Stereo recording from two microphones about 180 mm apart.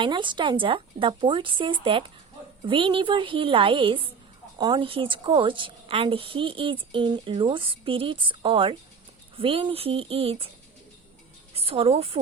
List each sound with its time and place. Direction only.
0.0 s a woman's voice: 25° right (ahead or behind)
11.5 s speech: 35° right (ahead or behind)